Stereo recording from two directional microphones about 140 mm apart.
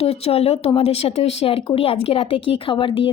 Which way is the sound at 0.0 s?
45° left (ahead or behind).